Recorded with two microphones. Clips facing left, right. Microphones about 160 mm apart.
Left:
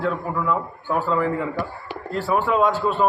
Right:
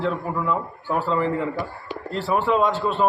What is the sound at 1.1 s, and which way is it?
Speech, 25° right (ahead or behind).